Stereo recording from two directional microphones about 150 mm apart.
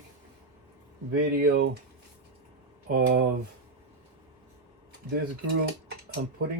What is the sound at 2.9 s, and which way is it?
Speech, 75° right (ahead or behind).